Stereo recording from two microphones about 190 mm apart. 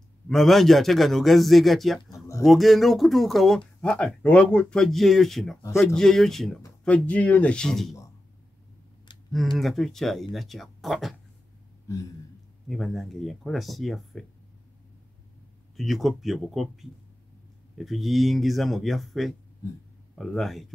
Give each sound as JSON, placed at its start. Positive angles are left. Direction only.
{"t": 0.3, "sound": "speech", "side_deg": 0}
{"t": 5.6, "sound": "speech", "side_deg": 15}
{"t": 5.9, "sound": "speech", "side_deg": 0}
{"t": 9.3, "sound": "speech", "side_deg": 0}
{"t": 11.9, "sound": "a sound", "side_deg": 15}
{"t": 12.6, "sound": "speech", "side_deg": 0}
{"t": 15.7, "sound": "speech", "side_deg": 0}
{"t": 19.6, "sound": "speech", "side_deg": 15}
{"t": 20.2, "sound": "speech", "side_deg": 0}